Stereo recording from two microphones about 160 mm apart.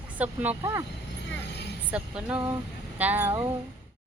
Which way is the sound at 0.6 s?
20° right (ahead or behind).